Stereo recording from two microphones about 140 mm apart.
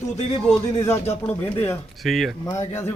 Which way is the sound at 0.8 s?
20° left (ahead or behind).